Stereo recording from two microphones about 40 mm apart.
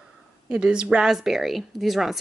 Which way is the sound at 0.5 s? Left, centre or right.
Right.